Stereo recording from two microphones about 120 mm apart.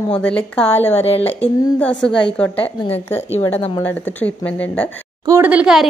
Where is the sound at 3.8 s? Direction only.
15° left (ahead or behind).